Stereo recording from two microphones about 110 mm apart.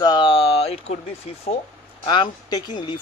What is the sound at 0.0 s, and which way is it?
Speech, 40° left (ahead or behind).